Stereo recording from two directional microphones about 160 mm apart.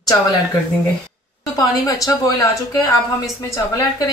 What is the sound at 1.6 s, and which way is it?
Speech, 20° left (ahead or behind).